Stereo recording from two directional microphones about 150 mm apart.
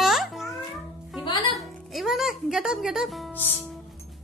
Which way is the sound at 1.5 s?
Centre (ahead or behind).